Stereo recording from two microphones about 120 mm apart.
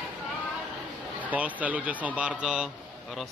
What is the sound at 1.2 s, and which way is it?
A man's voice, 15° right (ahead or behind).